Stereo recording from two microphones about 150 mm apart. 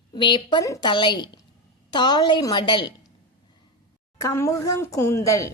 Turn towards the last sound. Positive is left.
turn(degrees=20)  # may be behind; listen again after turning